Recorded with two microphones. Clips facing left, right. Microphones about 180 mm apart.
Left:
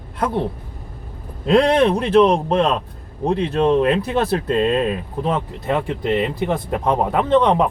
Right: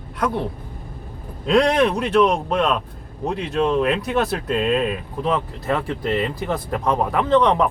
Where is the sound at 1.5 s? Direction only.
30° left (ahead or behind).